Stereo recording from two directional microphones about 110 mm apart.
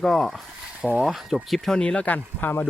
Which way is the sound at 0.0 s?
Centre (ahead or behind).